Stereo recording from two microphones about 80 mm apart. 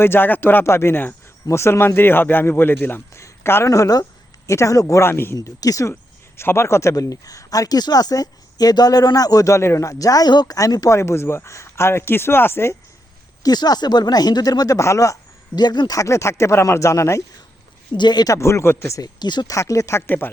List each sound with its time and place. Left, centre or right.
0.0 s a man's voice: left
3.7 s speech: left
5.4 s speech: left
6.3 s speech: left
10.9 s speech: left
13.4 s speech: left
14.8 s speech: left
15.5 s speech: left
16.0 s speech: left
17.9 s speech: left
18.3 s speech: left
19.2 s speech: left
19.5 s speech: left
20.0 s a man's voice: left